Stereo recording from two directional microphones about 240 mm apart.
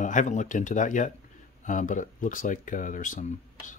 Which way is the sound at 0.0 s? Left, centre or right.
Left.